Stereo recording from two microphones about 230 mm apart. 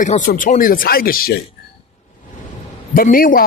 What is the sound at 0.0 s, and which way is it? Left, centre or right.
Speech, left.